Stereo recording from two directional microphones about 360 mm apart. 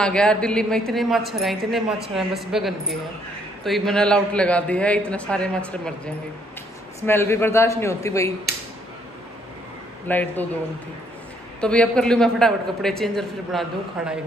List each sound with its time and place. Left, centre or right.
0.0 s speech: centre
7.0 s a man's voice: centre
8.5 s a sound: left
10.0 s speech: centre
11.6 s speech: centre